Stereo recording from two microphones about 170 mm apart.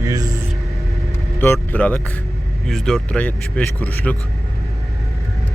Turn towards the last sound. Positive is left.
turn(degrees=10)  # may be behind; listen again after turning